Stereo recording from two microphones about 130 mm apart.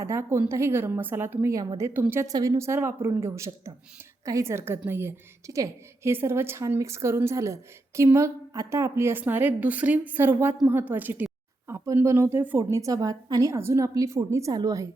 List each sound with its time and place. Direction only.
0.0 s a woman's voice: 20° right (ahead or behind)